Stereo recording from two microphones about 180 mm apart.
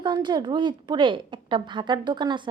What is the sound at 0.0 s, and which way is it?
A woman's voice, 25° right (ahead or behind).